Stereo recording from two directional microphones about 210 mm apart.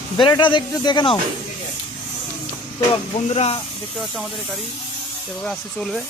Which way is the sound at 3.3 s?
30° left (ahead or behind).